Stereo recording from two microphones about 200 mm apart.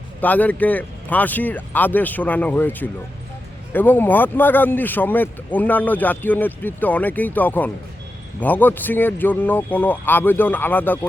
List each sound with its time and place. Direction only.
0.2 s speech: 10° left (ahead or behind)